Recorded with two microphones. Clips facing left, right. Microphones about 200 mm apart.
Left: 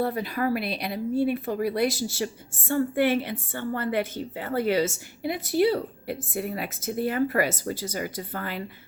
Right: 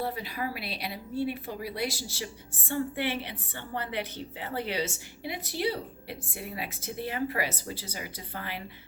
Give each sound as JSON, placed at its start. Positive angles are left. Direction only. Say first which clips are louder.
{"t": 0.0, "sound": "a woman's voice", "louder": "left 7 dB", "side_deg": 50}